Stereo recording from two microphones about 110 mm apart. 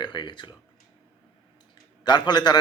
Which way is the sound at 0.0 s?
45° left (ahead or behind).